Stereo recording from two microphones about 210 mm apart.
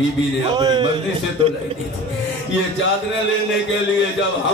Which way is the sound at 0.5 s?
20° right (ahead or behind).